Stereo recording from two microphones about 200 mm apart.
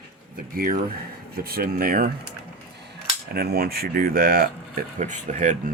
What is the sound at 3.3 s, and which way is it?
Speech, 50° right (ahead or behind).